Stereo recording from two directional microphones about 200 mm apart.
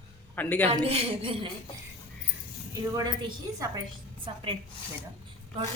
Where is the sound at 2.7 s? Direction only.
20° right (ahead or behind).